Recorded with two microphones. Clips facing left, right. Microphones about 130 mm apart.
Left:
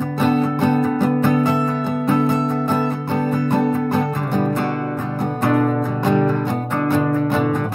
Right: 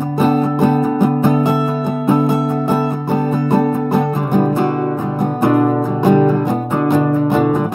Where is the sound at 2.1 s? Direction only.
15° right (ahead or behind).